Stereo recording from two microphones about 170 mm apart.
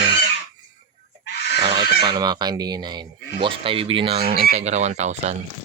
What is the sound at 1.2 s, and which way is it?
Fowl, 85° left.